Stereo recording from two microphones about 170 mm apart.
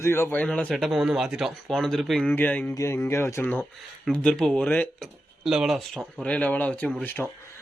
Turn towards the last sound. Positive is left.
turn(degrees=10)  # may be behind; listen again after turning